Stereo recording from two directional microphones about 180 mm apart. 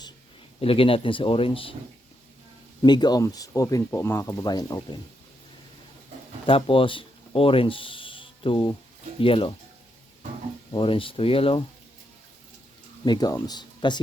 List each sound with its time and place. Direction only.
0.6 s speech: 30° left (ahead or behind)
2.8 s speech: 25° left (ahead or behind)
6.4 s speech: 30° left (ahead or behind)
10.7 s speech: 30° left (ahead or behind)
13.1 s speech: 20° left (ahead or behind)